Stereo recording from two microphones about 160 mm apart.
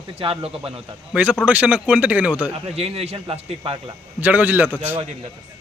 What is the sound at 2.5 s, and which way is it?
Speech, 40° right (ahead or behind).